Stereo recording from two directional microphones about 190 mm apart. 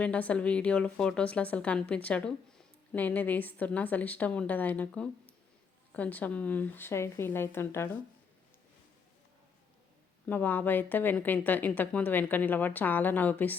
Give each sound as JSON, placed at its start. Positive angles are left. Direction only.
{"t": 0.0, "sound": "a woman's voice", "side_deg": 5}
{"t": 10.2, "sound": "a woman's voice", "side_deg": 10}